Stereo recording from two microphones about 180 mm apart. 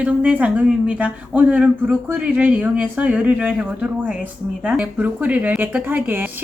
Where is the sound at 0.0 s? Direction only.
10° right (ahead or behind).